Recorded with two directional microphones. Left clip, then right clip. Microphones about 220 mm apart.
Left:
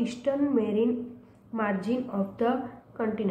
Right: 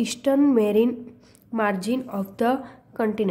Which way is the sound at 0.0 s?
50° right (ahead or behind).